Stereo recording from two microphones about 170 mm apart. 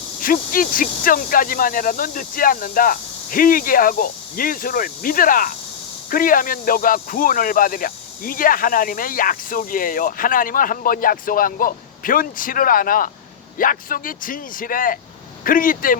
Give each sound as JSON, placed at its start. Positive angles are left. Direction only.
{"t": 0.2, "sound": "speech", "side_deg": 55}